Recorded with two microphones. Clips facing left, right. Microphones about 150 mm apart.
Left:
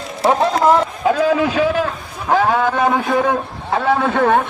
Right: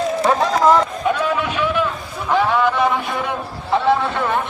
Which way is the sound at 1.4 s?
35° left (ahead or behind).